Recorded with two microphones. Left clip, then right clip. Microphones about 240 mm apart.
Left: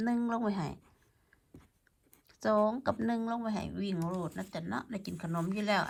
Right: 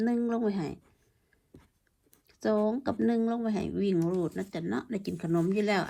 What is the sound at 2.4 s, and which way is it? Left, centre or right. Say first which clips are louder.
Speech: even; left.